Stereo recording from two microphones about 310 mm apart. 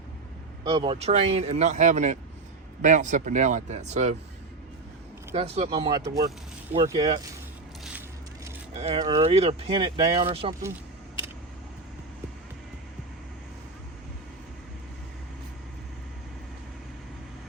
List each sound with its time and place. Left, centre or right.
0.7 s a man's voice: centre
5.3 s a man's voice: centre
8.8 s speech: centre